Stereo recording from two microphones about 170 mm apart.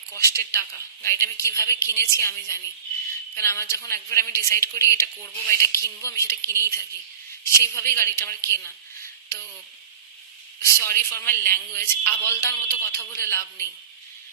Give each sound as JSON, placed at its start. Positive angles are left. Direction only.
{"t": 0.1, "sound": "a woman's voice", "side_deg": 15}
{"t": 10.6, "sound": "a woman's voice", "side_deg": 15}